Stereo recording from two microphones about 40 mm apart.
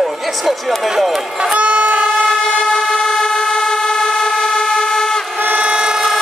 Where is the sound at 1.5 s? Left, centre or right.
Right.